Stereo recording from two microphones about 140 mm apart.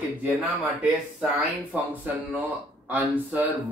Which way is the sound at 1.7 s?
10° right (ahead or behind).